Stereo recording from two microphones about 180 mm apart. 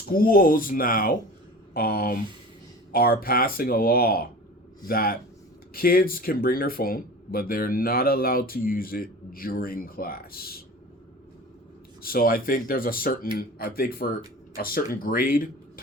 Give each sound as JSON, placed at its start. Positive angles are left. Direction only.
{"t": 0.1, "sound": "speech", "side_deg": 55}
{"t": 12.0, "sound": "speech", "side_deg": 55}